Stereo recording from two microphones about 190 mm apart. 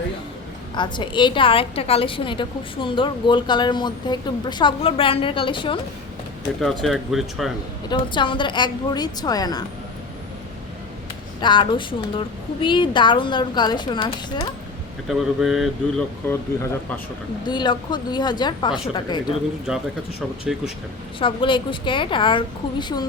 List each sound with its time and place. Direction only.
0.8 s a woman's voice: 25° left (ahead or behind)
6.6 s speech: centre (ahead or behind)
7.9 s a woman's voice: 25° left (ahead or behind)
11.3 s a woman's voice: 25° left (ahead or behind)
15.0 s speech: centre (ahead or behind)
17.4 s a woman's voice: 25° left (ahead or behind)
20.4 s speech: centre (ahead or behind)
21.2 s a woman's voice: 25° left (ahead or behind)